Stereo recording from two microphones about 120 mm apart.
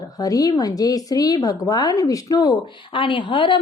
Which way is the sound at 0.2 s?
30° left (ahead or behind).